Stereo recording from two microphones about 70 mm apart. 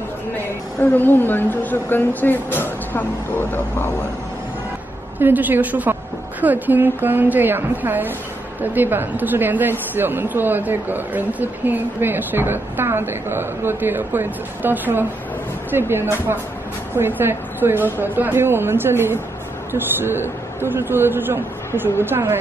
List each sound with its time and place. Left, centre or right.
0.9 s speech: left
5.2 s a man's voice: right